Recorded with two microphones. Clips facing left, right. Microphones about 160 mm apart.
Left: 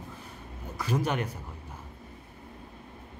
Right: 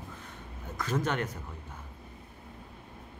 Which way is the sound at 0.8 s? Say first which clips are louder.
Left 1 dB; 10° left (ahead or behind).